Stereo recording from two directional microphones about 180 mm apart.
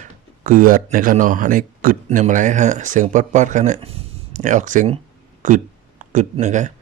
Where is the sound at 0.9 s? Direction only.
50° right (ahead or behind).